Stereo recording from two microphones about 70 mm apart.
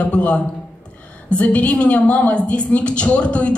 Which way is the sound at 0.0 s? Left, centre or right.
Centre.